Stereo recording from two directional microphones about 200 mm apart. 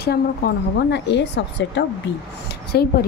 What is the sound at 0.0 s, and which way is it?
A woman's voice, 55° left (ahead or behind).